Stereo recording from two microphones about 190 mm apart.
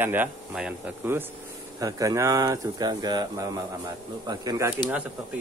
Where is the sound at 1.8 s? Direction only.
15° right (ahead or behind).